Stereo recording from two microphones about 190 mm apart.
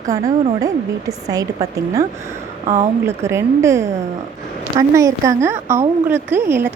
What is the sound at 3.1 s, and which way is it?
Speech, 15° right (ahead or behind).